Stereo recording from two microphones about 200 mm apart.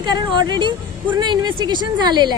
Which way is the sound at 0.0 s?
20° right (ahead or behind).